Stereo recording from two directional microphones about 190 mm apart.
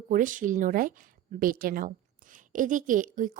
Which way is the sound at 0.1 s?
45° right (ahead or behind).